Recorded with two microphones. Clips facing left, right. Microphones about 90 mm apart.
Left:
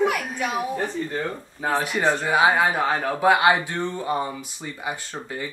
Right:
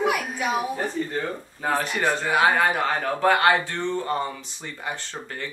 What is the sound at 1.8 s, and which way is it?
Speech, 15° left (ahead or behind).